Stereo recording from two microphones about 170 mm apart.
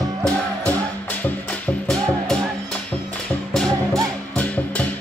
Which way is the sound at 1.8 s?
5° left (ahead or behind).